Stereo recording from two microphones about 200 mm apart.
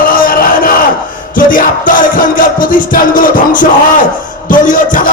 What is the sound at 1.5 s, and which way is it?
Music, 40° left (ahead or behind).